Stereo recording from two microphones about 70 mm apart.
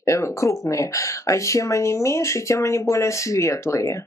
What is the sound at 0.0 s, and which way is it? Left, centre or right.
Speech, left.